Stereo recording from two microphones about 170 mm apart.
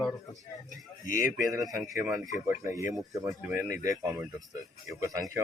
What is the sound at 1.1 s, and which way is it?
Speech, 55° left (ahead or behind).